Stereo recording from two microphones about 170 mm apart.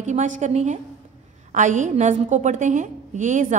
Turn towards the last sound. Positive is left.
turn(degrees=-50)  # may be behind; listen again after turning